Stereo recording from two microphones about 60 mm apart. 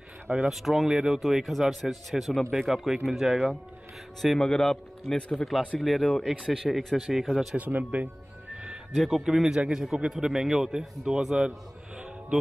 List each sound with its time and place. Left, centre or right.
0.5 s speech: centre
4.2 s a man's voice: centre
7.5 s speech: right
8.9 s a man's voice: centre